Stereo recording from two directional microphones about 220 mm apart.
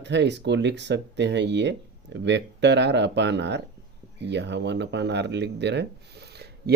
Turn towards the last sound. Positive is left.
turn(degrees=-50)  # may be behind; listen again after turning